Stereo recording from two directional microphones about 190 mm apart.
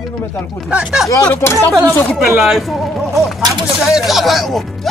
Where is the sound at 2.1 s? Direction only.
Centre (ahead or behind).